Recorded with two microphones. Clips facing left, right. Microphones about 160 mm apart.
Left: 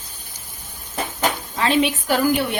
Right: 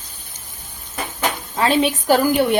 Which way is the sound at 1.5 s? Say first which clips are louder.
Right 3 dB; 40° right (ahead or behind).